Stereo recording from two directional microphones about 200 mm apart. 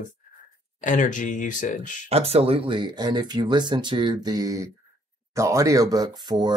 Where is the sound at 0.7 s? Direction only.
40° left (ahead or behind).